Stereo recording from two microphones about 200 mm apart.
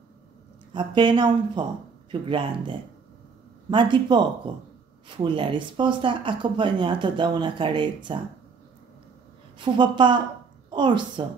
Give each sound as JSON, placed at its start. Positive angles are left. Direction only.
{"t": 0.7, "sound": "speech", "side_deg": -25}
{"t": 9.6, "sound": "a woman's voice", "side_deg": -25}